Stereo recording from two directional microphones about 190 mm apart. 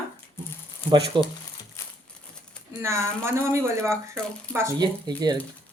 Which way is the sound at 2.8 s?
15° right (ahead or behind).